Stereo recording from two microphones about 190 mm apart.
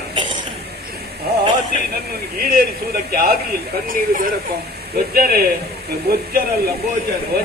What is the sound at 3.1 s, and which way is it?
A man's voice, 50° right (ahead or behind).